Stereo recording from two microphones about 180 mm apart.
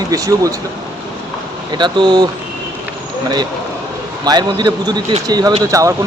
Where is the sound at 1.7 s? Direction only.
25° right (ahead or behind).